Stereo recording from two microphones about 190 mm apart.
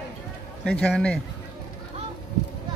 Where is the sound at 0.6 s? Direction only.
5° left (ahead or behind).